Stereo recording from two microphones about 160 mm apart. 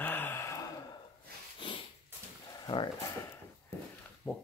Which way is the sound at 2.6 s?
30° left (ahead or behind).